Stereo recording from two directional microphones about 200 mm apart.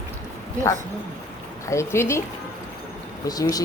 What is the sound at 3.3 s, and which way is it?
Speech, 20° left (ahead or behind).